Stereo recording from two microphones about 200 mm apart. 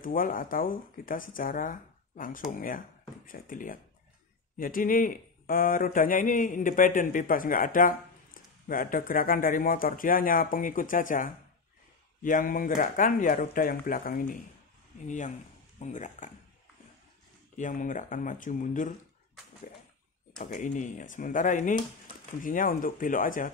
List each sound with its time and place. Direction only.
0.0 s speech: 45° left (ahead or behind)
17.6 s speech: 40° left (ahead or behind)
20.3 s speech: 45° left (ahead or behind)